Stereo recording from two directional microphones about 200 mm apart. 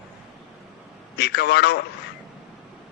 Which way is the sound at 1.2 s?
55° left (ahead or behind).